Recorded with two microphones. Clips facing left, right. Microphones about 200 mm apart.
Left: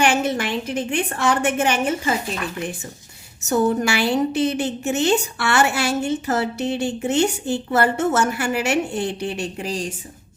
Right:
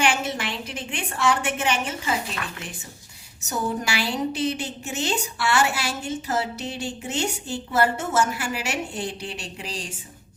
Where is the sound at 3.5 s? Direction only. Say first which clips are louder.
Left 8 dB; 60° left (ahead or behind).